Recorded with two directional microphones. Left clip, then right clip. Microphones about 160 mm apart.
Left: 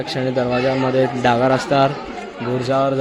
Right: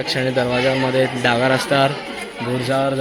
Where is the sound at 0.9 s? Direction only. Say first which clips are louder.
Left 1 dB; 10° left (ahead or behind).